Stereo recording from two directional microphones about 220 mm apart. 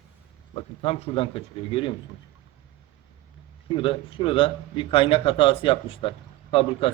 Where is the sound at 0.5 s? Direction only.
25° left (ahead or behind).